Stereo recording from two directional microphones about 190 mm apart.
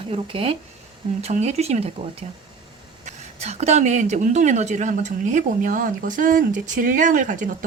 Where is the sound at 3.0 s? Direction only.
35° right (ahead or behind).